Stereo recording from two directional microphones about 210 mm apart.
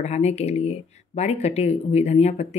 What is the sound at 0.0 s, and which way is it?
Speech, 30° left (ahead or behind).